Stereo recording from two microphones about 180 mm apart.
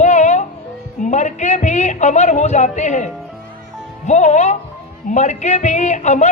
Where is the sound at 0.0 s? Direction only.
40° left (ahead or behind).